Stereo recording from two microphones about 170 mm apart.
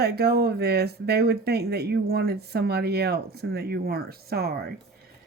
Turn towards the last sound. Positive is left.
turn(degrees=-65)  # may be behind; listen again after turning